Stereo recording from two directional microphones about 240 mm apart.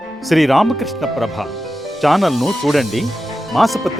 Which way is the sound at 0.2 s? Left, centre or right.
Centre.